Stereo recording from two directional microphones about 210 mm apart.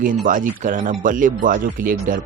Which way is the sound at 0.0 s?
40° right (ahead or behind).